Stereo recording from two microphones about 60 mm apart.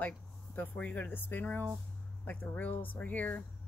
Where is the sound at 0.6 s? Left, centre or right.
Left.